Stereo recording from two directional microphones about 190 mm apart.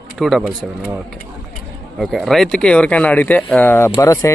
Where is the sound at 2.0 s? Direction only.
Centre (ahead or behind).